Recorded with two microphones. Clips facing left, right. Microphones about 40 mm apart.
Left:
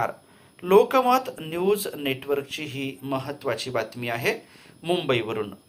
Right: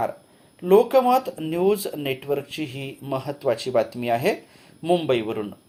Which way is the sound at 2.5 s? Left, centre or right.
Left.